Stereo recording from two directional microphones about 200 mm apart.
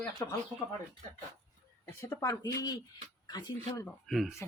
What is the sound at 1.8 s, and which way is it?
A woman's voice, 15° left (ahead or behind).